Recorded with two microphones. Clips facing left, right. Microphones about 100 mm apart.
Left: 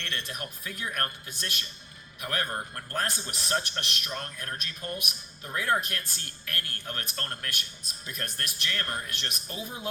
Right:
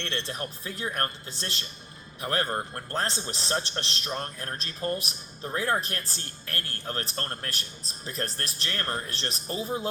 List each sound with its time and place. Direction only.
0.0 s a man's voice: 30° right (ahead or behind)